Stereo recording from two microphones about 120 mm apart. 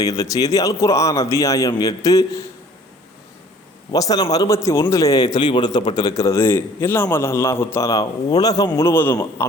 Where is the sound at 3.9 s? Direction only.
30° left (ahead or behind).